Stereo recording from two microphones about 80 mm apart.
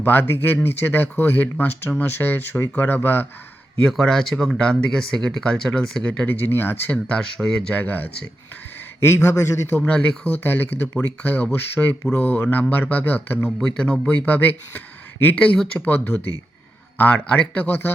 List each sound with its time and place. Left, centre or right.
0.0 s speech: left
3.8 s speech: centre
6.2 s speech: left
6.9 s speech: centre
7.7 s speech: left
9.0 s a man's voice: left
9.7 s speech: centre
13.6 s speech: centre; by 17.9 s left